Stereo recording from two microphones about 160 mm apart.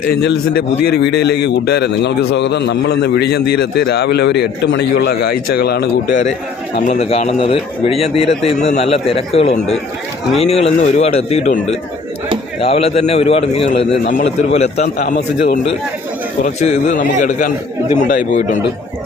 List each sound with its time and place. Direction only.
0.2 s a man's voice: 85° left
6.7 s speech: 45° left (ahead or behind)
14.0 s a man's voice: 55° left (ahead or behind)
16.6 s a man's voice: 45° left (ahead or behind)